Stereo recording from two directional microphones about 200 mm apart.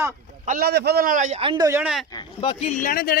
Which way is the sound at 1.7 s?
10° right (ahead or behind).